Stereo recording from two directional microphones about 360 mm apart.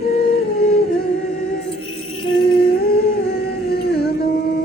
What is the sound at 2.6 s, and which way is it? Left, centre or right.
Humming, left.